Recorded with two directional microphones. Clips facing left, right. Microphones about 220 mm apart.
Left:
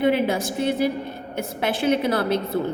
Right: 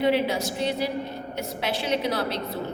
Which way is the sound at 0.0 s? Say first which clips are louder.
Left 3 dB; 50° left (ahead or behind).